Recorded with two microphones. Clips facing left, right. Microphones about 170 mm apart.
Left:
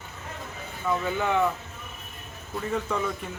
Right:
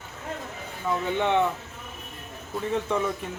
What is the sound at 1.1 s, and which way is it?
Speech, 25° right (ahead or behind).